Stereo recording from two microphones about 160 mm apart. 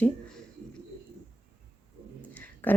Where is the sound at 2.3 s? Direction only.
10° left (ahead or behind).